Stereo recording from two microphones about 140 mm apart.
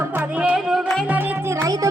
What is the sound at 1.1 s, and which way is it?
Music, 15° right (ahead or behind).